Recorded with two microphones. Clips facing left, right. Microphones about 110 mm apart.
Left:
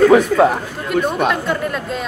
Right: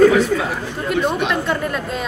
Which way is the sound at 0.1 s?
50° left (ahead or behind).